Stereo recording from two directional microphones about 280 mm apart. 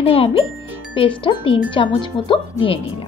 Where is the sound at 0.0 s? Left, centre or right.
Centre.